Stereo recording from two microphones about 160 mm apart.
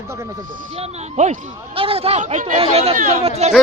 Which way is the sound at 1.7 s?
35° right (ahead or behind).